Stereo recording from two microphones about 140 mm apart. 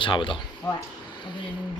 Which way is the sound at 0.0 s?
35° left (ahead or behind).